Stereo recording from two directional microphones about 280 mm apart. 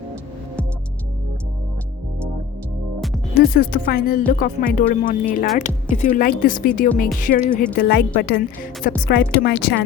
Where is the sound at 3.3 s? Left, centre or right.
Left.